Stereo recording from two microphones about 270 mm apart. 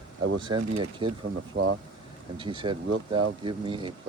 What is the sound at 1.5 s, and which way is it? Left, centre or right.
Speech, right.